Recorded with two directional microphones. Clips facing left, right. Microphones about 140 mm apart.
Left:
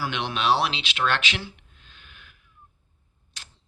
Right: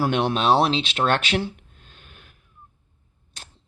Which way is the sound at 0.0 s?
40° right (ahead or behind).